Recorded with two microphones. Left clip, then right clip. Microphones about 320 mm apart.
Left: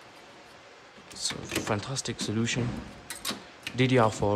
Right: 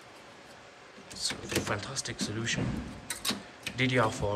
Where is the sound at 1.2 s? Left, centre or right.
Centre.